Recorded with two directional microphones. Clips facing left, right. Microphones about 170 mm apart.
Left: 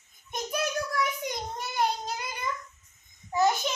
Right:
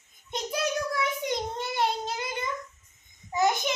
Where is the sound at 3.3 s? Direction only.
15° right (ahead or behind).